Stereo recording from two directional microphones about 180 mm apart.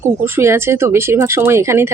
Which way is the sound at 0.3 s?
15° right (ahead or behind).